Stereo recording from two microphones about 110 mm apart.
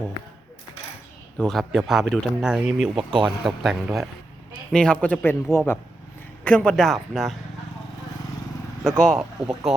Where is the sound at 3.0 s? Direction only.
40° right (ahead or behind).